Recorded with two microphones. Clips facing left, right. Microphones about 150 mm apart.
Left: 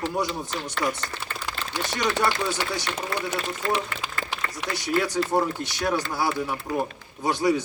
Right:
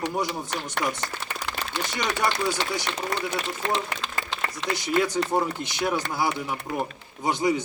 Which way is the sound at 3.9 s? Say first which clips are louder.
Even; 10° left (ahead or behind).